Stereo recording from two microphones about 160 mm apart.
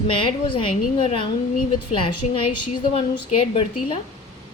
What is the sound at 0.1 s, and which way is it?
A woman's voice, 30° left (ahead or behind).